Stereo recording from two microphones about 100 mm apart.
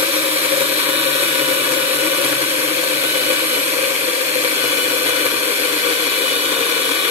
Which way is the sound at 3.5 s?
90° right.